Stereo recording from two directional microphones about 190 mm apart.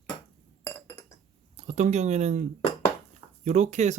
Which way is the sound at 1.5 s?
40° right (ahead or behind).